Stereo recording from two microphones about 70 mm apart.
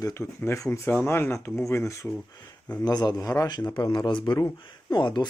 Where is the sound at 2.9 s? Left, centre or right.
Left.